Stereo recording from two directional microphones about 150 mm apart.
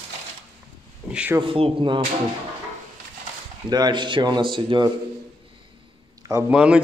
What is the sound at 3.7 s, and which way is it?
Speech, 30° right (ahead or behind).